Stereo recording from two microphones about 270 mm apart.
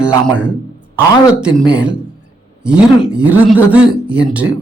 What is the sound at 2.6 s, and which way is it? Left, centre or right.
Speech, centre.